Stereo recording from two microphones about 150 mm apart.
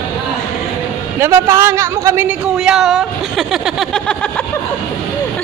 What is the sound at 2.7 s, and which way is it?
Speech, centre (ahead or behind).